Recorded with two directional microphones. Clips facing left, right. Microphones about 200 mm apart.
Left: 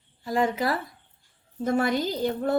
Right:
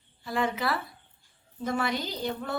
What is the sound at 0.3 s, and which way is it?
A woman's voice, 40° left (ahead or behind).